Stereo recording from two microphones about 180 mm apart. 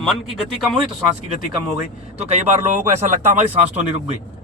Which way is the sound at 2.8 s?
40° right (ahead or behind).